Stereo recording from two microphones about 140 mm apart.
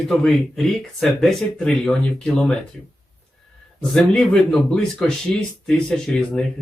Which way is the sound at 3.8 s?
5° left (ahead or behind).